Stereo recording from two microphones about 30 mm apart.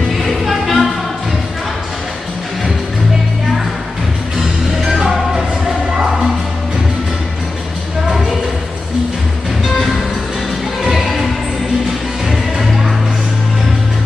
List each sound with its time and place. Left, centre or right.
0.5 s music: centre
4.8 s music: centre
10.8 s music: centre
12.3 s music: centre